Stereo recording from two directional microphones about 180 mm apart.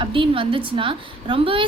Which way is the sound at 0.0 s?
30° right (ahead or behind).